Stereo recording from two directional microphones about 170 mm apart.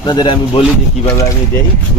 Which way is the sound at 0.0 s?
25° left (ahead or behind).